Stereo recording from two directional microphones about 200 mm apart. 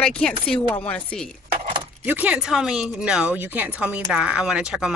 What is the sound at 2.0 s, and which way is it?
Speech, 5° right (ahead or behind).